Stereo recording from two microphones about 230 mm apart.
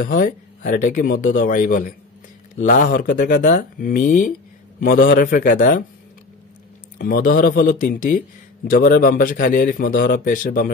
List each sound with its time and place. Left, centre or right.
0.0 s a man's voice: left
7.0 s a man's voice: left